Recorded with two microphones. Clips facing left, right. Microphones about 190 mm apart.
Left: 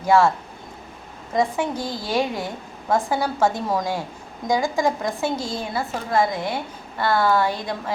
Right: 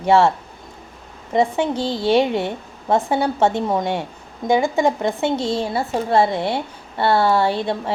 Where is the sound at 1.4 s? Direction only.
25° right (ahead or behind).